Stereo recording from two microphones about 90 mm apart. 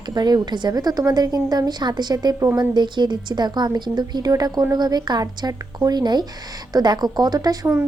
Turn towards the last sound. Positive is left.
turn(degrees=-45)  # may be behind; listen again after turning